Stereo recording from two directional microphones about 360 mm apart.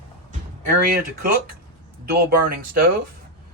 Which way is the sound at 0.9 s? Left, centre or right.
Right.